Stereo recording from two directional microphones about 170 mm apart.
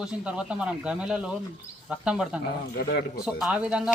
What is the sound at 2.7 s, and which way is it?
Speech, 70° left (ahead or behind).